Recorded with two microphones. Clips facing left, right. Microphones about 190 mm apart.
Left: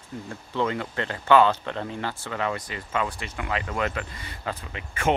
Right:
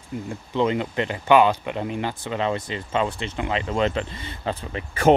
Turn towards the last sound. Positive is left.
turn(degrees=-40)  # may be behind; listen again after turning